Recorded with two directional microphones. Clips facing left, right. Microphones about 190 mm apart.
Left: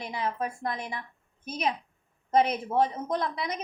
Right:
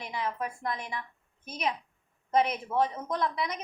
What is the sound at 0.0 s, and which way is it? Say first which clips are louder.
A woman's voice: left 2 dB; 35° left (ahead or behind).